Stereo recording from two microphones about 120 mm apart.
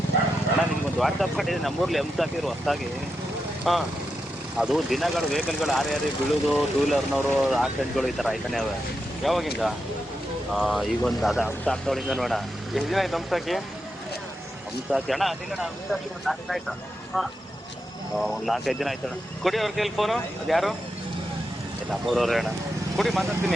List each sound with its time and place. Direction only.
0.9 s speech: centre (ahead or behind)
14.8 s speech: 5° right (ahead or behind)
21.8 s speech: centre (ahead or behind)